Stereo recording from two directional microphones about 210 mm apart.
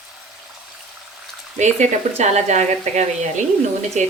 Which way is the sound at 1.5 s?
35° right (ahead or behind).